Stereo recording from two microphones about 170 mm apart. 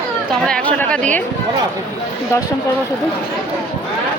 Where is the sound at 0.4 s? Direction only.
5° left (ahead or behind).